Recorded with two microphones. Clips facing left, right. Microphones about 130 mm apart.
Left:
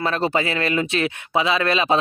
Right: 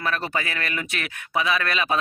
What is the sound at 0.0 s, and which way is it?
A man's voice, 25° left (ahead or behind).